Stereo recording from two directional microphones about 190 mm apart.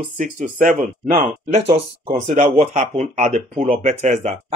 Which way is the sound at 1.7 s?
35° right (ahead or behind).